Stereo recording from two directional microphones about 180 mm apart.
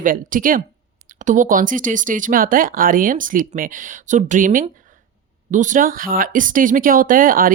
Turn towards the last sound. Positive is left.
turn(degrees=-50)  # may be behind; listen again after turning